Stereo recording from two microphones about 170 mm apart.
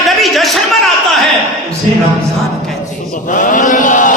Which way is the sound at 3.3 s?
50° left (ahead or behind).